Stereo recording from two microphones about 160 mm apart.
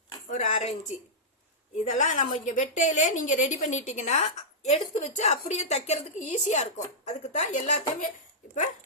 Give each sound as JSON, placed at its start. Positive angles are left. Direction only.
{"t": 0.3, "sound": "a woman's voice", "side_deg": 50}